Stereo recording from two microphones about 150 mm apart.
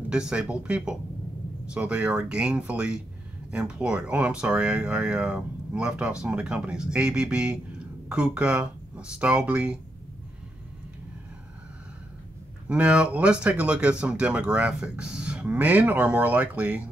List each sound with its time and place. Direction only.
0.1 s speech: 5° right (ahead or behind)
12.6 s speech: 5° right (ahead or behind)